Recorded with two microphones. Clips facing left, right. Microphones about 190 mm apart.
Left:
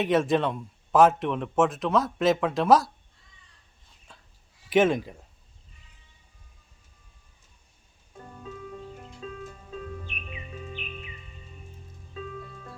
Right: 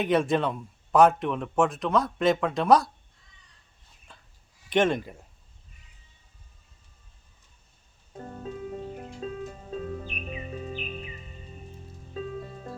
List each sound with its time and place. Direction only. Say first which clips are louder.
0.0 s speech: left 1 dB; centre (ahead or behind)
4.1 s whispering: even; centre (ahead or behind)
4.7 s speech: left 2 dB; 5° left (ahead or behind)
8.1 s music: right 5 dB; 35° right (ahead or behind)